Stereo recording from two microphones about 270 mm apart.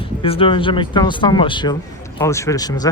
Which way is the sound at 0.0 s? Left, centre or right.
Centre.